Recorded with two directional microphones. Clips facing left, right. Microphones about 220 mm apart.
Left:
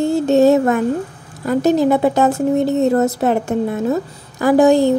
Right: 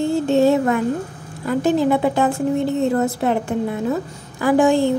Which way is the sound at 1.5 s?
40° left (ahead or behind).